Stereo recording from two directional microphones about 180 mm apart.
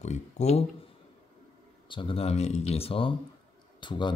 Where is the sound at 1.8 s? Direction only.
30° left (ahead or behind).